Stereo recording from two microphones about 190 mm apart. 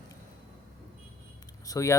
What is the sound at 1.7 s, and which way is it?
Speech, 15° left (ahead or behind).